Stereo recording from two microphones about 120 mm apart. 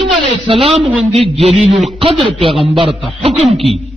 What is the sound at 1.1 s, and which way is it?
A man's voice, 55° right (ahead or behind).